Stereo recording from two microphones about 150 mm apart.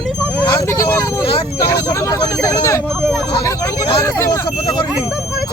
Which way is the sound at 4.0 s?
20° left (ahead or behind).